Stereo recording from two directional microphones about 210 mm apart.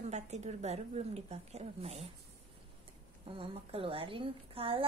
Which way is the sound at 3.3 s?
25° right (ahead or behind).